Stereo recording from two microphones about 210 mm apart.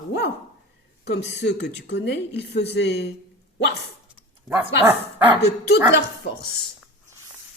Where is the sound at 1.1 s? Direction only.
55° left (ahead or behind).